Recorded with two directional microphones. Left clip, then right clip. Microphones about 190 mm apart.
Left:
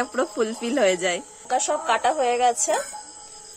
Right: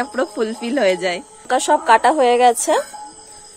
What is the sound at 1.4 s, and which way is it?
A woman's voice, 45° right (ahead or behind).